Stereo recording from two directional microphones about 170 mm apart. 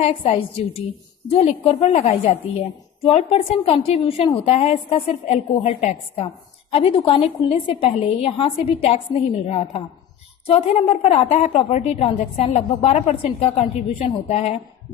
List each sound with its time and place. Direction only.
0.0 s a woman's voice: 35° left (ahead or behind)